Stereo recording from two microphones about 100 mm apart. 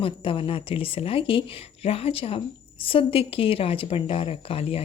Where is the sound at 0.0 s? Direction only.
65° left (ahead or behind).